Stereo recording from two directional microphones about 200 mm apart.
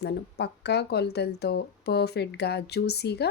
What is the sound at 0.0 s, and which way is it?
A woman's voice, 55° left (ahead or behind).